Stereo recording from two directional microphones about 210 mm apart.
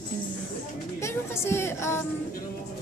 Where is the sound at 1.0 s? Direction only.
10° left (ahead or behind).